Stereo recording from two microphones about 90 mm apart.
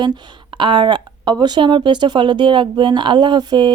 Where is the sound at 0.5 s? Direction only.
65° right (ahead or behind).